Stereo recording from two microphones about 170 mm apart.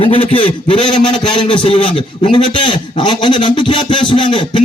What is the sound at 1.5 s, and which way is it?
Speech, 30° left (ahead or behind).